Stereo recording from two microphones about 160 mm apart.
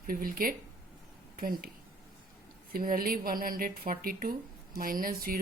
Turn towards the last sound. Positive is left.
turn(degrees=-65)  # may be behind; listen again after turning